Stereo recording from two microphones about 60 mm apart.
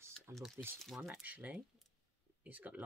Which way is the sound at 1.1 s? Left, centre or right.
Right.